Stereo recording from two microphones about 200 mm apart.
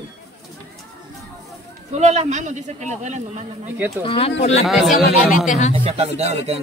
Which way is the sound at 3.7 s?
10° right (ahead or behind).